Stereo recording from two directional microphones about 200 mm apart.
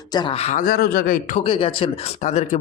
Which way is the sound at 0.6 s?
45° left (ahead or behind).